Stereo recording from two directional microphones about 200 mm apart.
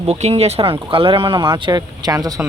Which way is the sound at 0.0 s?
30° right (ahead or behind).